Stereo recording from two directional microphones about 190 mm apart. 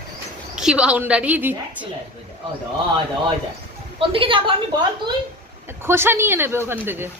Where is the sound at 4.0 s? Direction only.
30° right (ahead or behind).